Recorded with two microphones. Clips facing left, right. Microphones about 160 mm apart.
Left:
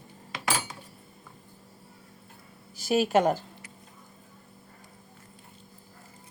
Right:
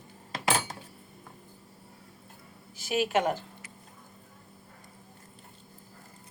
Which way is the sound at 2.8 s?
40° left (ahead or behind).